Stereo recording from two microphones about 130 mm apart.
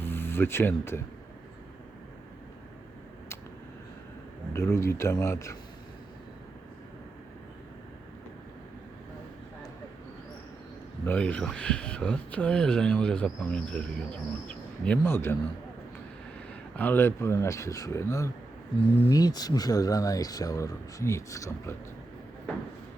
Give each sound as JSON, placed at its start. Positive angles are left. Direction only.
{"t": 0.0, "sound": "speech", "side_deg": 15}
{"t": 4.5, "sound": "speech", "side_deg": 20}
{"t": 11.0, "sound": "speech", "side_deg": 15}
{"t": 16.7, "sound": "speech", "side_deg": 15}